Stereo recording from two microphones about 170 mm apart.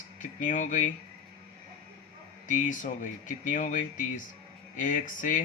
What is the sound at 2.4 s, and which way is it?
Speech, 50° left (ahead or behind).